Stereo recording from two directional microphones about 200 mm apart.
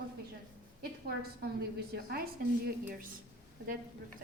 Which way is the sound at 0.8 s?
50° right (ahead or behind).